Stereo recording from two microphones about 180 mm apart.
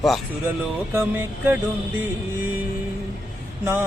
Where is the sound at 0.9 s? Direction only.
10° right (ahead or behind).